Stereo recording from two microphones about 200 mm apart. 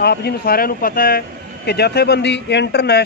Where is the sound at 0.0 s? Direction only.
55° left (ahead or behind).